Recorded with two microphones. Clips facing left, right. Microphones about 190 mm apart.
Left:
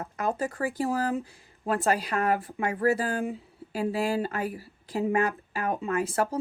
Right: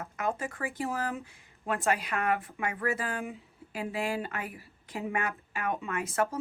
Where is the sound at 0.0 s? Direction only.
35° left (ahead or behind).